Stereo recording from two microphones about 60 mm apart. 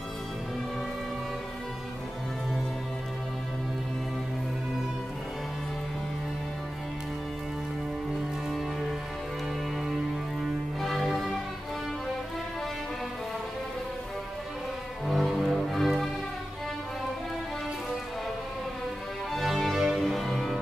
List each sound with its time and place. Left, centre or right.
9.8 s music: centre
15.0 s music: centre
19.3 s music: centre